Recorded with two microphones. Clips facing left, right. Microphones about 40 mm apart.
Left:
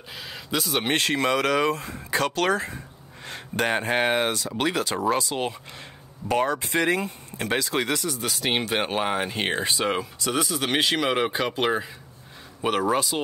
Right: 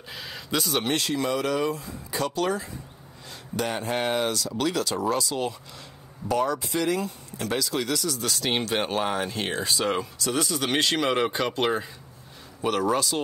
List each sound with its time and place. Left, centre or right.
0.1 s a sound: centre
1.0 s speech: left
3.3 s speech: left
8.2 s speech: centre
10.4 s speech: centre
12.6 s speech: left